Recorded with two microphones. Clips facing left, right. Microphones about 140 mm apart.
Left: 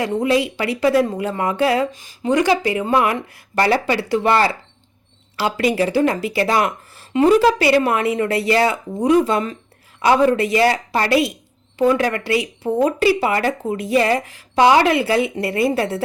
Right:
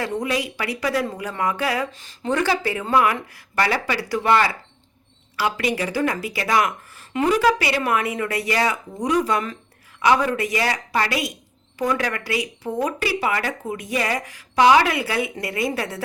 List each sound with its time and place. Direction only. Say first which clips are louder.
0.0 s speech: left 6 dB; 25° left (ahead or behind)
1.9 s speech: left 5 dB; 10° left (ahead or behind); by 16.0 s 25° left (ahead or behind)